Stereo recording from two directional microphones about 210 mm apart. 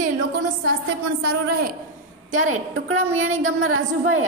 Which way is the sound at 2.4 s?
85° right.